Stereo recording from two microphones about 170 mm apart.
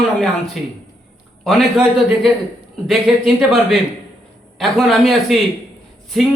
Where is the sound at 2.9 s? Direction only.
Centre (ahead or behind).